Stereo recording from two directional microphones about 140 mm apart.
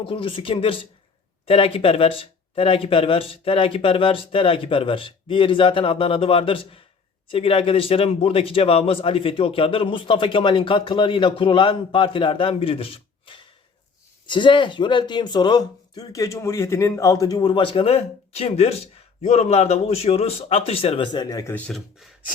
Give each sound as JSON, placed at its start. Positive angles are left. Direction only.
{"t": 0.0, "sound": "a man's voice", "side_deg": 35}
{"t": 21.5, "sound": "speech", "side_deg": 0}